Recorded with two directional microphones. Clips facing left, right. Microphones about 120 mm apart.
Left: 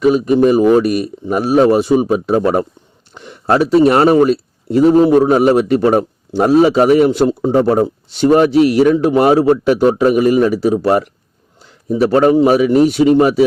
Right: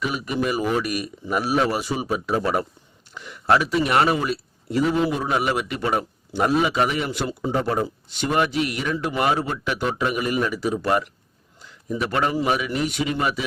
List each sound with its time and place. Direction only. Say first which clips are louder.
0.0 s a man's voice: left 14 dB; 30° left (ahead or behind)
11.6 s a sound: left 12 dB; 35° left (ahead or behind)
12.4 s a man's voice: left 13 dB; 35° left (ahead or behind)